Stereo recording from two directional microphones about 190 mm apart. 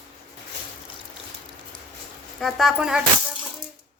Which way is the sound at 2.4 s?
Centre (ahead or behind).